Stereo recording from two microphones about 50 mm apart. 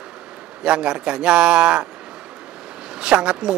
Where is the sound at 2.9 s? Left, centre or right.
Centre.